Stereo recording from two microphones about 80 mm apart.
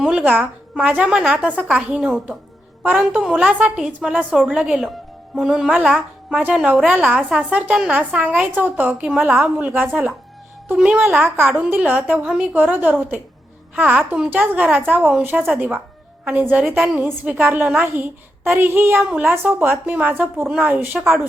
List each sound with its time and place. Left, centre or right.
0.0 s a woman's voice: centre
10.8 s a woman's voice: centre
11.0 s a woman's voice: right